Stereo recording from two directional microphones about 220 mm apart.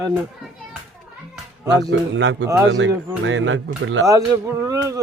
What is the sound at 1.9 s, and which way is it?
Speech, 55° right (ahead or behind).